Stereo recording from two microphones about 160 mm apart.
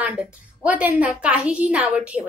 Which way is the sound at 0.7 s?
10° right (ahead or behind).